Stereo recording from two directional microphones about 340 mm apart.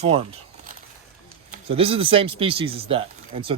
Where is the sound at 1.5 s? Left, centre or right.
Centre.